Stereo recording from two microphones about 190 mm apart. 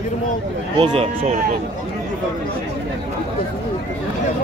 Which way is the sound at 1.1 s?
45° right (ahead or behind).